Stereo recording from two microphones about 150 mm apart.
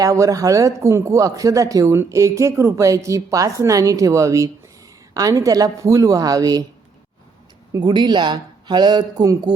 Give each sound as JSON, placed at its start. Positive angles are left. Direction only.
{"t": 0.0, "sound": "speech", "side_deg": -20}
{"t": 7.7, "sound": "speech", "side_deg": -25}